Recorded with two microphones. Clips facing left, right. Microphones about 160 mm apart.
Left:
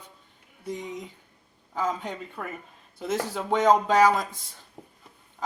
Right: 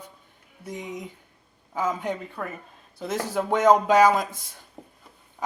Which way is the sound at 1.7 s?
5° right (ahead or behind).